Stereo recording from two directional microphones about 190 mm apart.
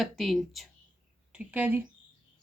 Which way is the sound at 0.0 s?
Centre (ahead or behind).